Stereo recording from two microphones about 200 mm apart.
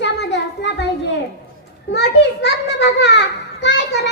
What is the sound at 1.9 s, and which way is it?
Children playing, 60° left (ahead or behind).